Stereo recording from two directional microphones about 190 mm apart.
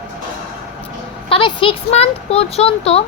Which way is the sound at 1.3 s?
25° left (ahead or behind).